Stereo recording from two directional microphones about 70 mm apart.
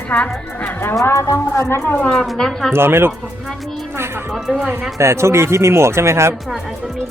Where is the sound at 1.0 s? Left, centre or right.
Left.